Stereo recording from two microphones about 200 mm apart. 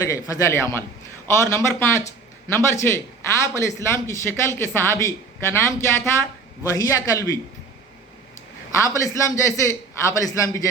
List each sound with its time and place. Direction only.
0.0 s speech: 15° left (ahead or behind)
8.8 s speech: 15° left (ahead or behind)